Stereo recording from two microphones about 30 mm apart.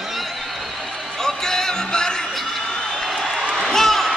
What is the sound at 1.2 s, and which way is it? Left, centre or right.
Music, centre.